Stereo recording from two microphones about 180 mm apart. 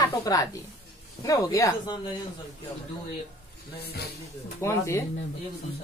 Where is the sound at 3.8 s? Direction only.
60° left (ahead or behind).